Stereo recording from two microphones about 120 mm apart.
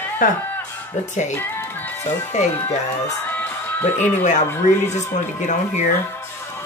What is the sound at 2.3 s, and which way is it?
Speech, 70° left (ahead or behind).